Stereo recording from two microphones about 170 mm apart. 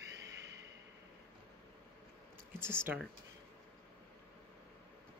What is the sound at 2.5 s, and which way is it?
Speech, 15° right (ahead or behind).